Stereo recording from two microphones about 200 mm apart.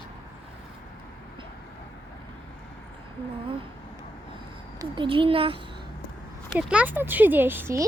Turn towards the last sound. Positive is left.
turn(degrees=-10)  # may be behind; listen again after turning